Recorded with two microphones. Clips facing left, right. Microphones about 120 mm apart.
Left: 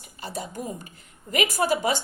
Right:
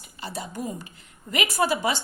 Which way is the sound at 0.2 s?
45° left (ahead or behind).